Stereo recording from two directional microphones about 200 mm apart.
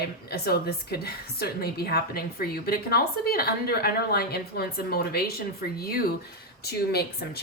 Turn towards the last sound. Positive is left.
turn(degrees=55)  # may be behind; listen again after turning